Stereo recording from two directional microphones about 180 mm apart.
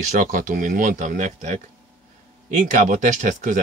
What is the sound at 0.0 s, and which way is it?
Speech, 45° right (ahead or behind).